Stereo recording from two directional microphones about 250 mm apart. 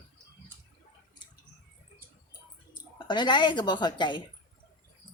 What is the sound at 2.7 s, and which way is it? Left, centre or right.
Speech, centre.